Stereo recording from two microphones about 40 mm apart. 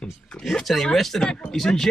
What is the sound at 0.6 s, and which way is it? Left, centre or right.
Speech, centre.